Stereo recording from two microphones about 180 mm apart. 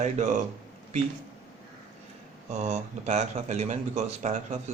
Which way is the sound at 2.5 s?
40° right (ahead or behind).